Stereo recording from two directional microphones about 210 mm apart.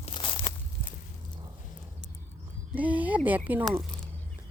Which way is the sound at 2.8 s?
5° right (ahead or behind).